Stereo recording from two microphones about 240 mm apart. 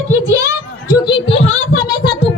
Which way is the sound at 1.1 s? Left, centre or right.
Left.